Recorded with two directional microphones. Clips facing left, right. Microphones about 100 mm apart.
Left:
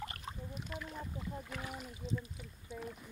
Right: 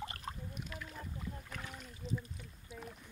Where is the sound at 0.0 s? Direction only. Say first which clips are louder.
Right 1 dB; 35° right (ahead or behind).